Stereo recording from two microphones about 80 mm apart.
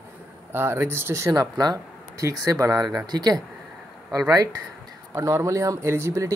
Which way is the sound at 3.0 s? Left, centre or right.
Right.